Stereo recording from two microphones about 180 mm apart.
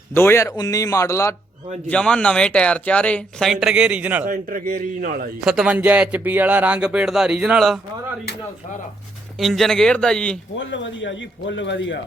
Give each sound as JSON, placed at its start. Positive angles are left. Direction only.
{"t": 0.1, "sound": "a man's voice", "side_deg": 15}
{"t": 1.9, "sound": "speech", "side_deg": 5}
{"t": 4.3, "sound": "a man's voice", "side_deg": -50}
{"t": 5.4, "sound": "speech", "side_deg": -5}
{"t": 9.4, "sound": "speech", "side_deg": 0}
{"t": 10.6, "sound": "a man's voice", "side_deg": 90}